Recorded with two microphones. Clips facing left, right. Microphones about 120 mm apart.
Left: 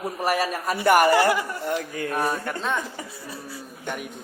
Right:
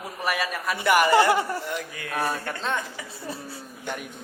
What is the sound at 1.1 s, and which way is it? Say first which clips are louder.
Speech: right 1 dB; 25° right (ahead or behind).